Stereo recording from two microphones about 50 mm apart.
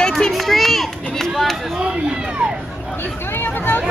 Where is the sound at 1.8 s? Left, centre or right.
Centre.